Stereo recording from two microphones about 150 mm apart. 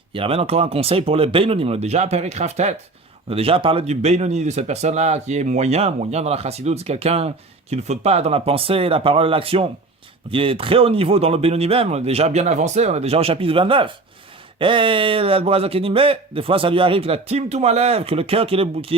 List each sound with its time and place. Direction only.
0.1 s a man's voice: 40° right (ahead or behind)